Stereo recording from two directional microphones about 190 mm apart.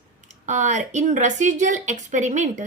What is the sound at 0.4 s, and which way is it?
A woman's voice, 40° right (ahead or behind).